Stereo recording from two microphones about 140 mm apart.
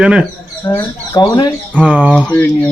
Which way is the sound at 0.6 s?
25° left (ahead or behind).